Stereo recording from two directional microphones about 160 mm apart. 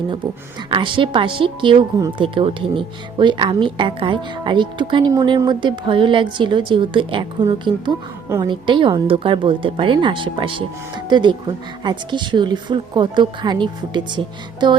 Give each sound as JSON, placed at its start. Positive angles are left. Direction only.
{"t": 0.7, "sound": "a woman's voice", "side_deg": -30}